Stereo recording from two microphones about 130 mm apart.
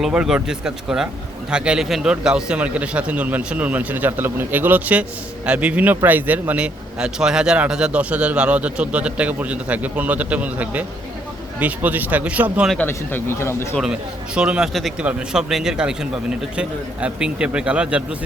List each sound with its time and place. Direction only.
0.0 s a man's voice: 5° right (ahead or behind)
12.9 s speech: 15° left (ahead or behind)
13.7 s a man's voice: 5° right (ahead or behind)